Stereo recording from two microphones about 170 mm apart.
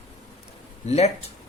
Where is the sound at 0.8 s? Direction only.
40° left (ahead or behind).